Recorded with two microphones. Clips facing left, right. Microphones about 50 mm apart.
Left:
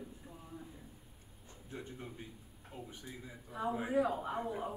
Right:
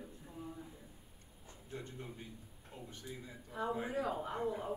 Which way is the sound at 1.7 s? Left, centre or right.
Centre.